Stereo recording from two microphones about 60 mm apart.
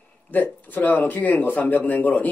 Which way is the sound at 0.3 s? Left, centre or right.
Left.